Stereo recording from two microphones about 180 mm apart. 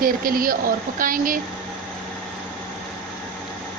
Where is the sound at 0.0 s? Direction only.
50° right (ahead or behind).